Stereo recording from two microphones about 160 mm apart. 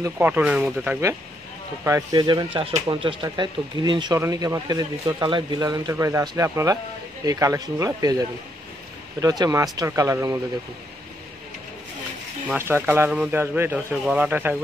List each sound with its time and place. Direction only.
0.0 s speech: 10° right (ahead or behind)
1.9 s speech: 25° right (ahead or behind)
12.5 s speech: 15° right (ahead or behind)